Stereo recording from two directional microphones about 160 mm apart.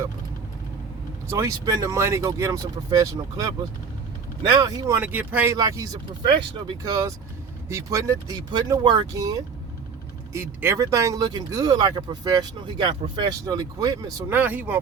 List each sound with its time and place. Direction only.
1.3 s speech: 20° right (ahead or behind)
5.5 s speech: 20° right (ahead or behind)
14.3 s speech: 10° right (ahead or behind)